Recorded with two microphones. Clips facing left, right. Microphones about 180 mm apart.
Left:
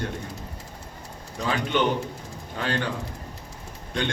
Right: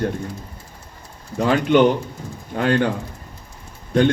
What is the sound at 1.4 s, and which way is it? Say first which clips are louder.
A man's voice: right 10 dB; 50° right (ahead or behind).